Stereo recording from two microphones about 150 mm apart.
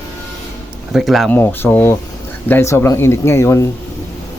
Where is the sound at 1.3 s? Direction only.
10° left (ahead or behind).